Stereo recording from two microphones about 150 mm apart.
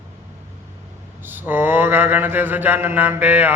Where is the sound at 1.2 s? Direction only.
15° right (ahead or behind).